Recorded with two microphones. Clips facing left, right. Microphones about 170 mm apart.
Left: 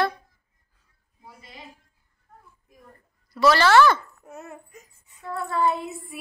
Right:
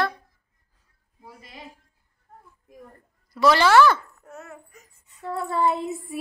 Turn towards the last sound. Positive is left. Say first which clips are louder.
# right 1 dB
turn(degrees=-25)  # may be behind; listen again after turning